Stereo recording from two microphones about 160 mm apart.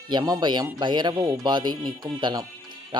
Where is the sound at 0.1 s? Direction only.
25° right (ahead or behind).